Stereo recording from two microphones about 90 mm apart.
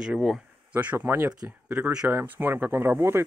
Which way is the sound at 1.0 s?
25° right (ahead or behind).